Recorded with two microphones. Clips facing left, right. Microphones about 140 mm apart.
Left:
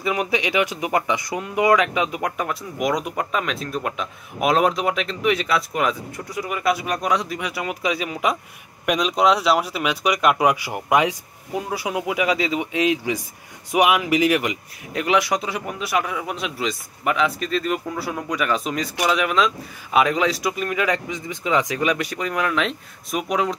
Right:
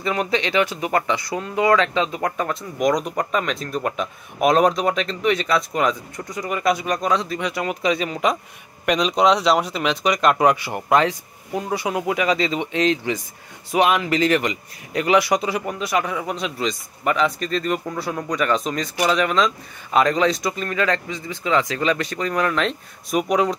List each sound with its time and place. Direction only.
0.0 s speech: 10° left (ahead or behind)